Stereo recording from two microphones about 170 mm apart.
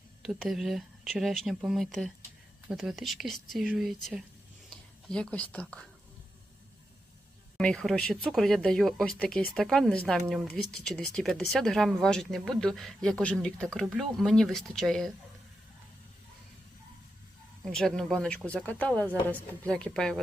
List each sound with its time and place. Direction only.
0.2 s speech: centre (ahead or behind)
7.6 s speech: 5° left (ahead or behind)
17.7 s speech: 5° left (ahead or behind)